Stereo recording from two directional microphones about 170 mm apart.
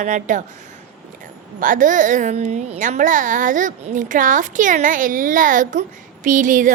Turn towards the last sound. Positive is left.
turn(degrees=-50)  # may be behind; listen again after turning